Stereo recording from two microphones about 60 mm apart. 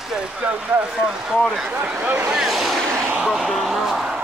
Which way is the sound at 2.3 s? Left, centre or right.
Centre.